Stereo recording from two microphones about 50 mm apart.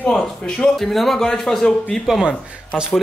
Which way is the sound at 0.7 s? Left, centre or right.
Centre.